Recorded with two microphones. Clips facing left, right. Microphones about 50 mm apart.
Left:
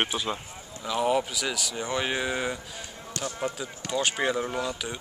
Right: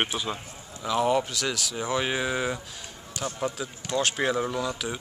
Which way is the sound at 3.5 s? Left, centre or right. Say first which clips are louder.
Right 1 dB; left.